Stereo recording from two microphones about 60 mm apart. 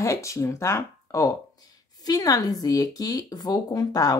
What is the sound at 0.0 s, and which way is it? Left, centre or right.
Speech, left.